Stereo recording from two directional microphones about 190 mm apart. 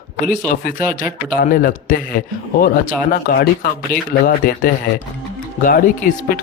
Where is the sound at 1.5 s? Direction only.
45° left (ahead or behind).